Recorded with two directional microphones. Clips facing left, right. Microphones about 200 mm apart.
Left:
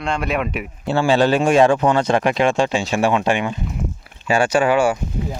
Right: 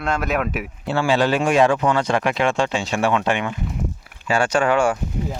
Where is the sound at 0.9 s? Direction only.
30° left (ahead or behind); by 4.9 s 5° left (ahead or behind).